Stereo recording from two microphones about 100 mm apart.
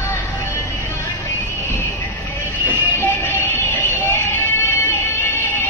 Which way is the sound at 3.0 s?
20° left (ahead or behind).